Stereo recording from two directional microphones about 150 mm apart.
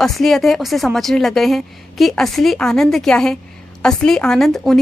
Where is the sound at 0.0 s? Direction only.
Centre (ahead or behind).